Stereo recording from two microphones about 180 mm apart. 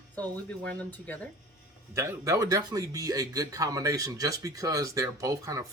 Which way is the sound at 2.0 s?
20° right (ahead or behind).